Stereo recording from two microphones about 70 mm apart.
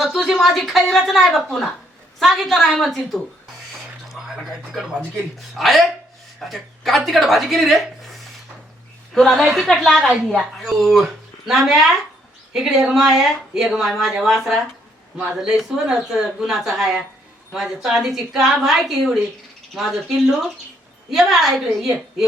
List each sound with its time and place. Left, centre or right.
0.0 s a woman's voice: centre
4.1 s a sound: centre
5.5 s a woman's voice: centre
9.1 s a woman's voice: centre
21.1 s a woman's voice: centre